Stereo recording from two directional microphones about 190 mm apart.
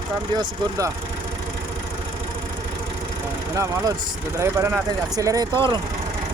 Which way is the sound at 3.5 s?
15° right (ahead or behind).